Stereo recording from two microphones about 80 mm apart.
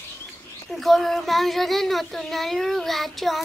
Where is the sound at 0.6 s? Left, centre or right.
Centre.